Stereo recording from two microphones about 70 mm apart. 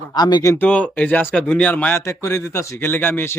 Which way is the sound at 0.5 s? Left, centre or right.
Left.